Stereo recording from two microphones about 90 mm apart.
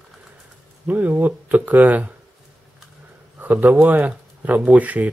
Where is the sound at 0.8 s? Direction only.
20° right (ahead or behind).